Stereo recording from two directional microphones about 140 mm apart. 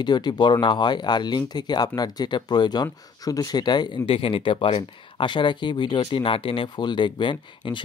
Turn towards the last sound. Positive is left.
turn(degrees=35)  # may be behind; listen again after turning